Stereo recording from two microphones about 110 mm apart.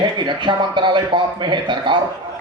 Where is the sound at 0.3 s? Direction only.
45° right (ahead or behind).